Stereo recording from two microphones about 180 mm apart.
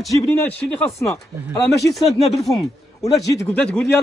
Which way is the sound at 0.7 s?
10° left (ahead or behind).